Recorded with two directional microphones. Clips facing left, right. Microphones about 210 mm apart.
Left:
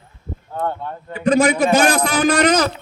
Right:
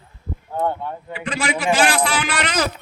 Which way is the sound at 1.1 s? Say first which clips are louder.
Left 10 dB; 40° left (ahead or behind).